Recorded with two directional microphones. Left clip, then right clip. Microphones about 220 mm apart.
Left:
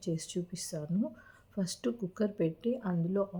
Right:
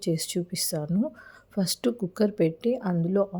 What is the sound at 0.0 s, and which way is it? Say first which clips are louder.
Speech: right 8 dB; 40° right (ahead or behind).